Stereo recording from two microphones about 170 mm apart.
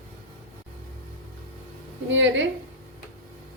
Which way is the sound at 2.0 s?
90° right.